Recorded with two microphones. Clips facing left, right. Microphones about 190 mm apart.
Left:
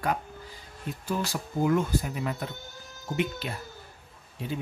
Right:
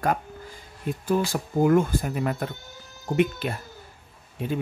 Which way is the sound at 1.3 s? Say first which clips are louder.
Right 5 dB; 55° right (ahead or behind).